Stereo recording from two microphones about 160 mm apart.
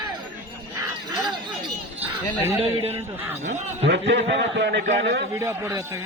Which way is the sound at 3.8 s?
90° right.